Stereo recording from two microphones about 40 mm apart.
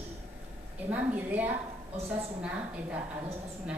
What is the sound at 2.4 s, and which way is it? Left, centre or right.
Speech, right.